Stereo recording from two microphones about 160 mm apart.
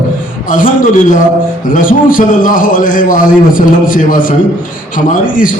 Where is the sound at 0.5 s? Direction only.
60° left (ahead or behind).